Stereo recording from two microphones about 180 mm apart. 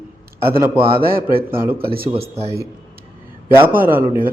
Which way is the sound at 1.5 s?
10° right (ahead or behind).